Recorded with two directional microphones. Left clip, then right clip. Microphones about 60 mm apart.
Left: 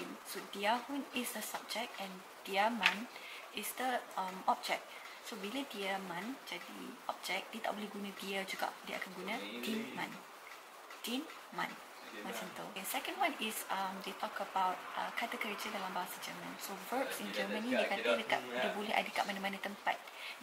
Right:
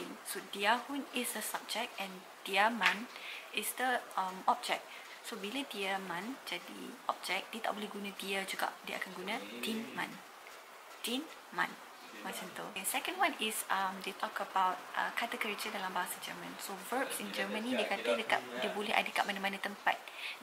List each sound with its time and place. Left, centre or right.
0.5 s speech: centre
7.1 s speech: centre
13.0 s speech: centre
16.9 s speech: right
17.4 s speech: centre